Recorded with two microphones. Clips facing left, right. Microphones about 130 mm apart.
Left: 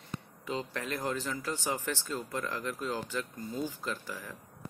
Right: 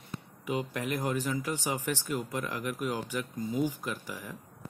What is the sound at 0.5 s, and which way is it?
Speech, 15° right (ahead or behind).